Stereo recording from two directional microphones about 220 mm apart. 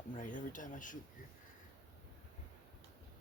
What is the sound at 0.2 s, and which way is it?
Speech, 35° left (ahead or behind).